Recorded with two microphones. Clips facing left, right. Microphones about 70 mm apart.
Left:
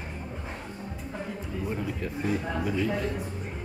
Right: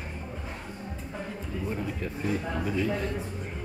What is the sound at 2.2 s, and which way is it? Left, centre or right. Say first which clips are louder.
Speech: left 1 dB; centre.